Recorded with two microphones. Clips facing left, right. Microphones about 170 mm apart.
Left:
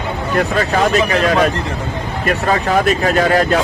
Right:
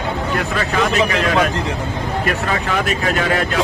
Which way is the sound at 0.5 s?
35° left (ahead or behind).